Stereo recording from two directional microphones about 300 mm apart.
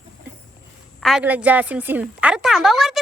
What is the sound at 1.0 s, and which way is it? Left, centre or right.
A woman's voice, centre.